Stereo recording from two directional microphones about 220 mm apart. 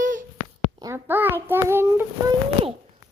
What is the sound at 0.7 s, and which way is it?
Child singing, 15° right (ahead or behind).